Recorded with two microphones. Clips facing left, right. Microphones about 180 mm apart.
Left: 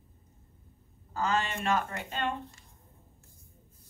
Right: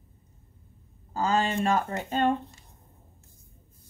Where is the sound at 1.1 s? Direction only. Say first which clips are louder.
Right 5 dB; 30° right (ahead or behind).